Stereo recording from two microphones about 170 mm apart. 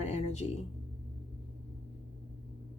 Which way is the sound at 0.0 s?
40° left (ahead or behind).